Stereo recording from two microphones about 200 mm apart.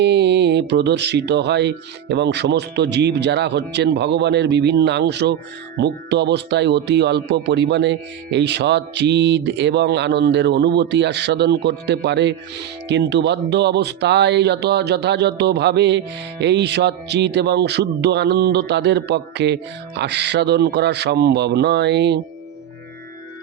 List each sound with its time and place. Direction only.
0.0 s speech: 60° right (ahead or behind)